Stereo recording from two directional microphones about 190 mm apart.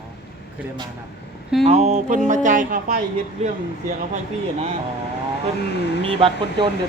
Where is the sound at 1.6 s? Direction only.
35° right (ahead or behind).